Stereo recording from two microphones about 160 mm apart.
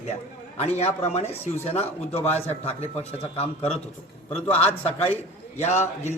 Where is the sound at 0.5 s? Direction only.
40° left (ahead or behind).